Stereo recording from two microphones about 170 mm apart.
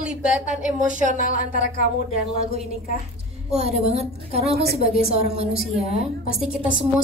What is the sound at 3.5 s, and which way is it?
Speech, 40° right (ahead or behind).